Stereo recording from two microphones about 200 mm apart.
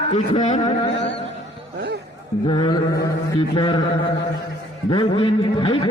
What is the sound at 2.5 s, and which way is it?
A man's voice, 25° left (ahead or behind).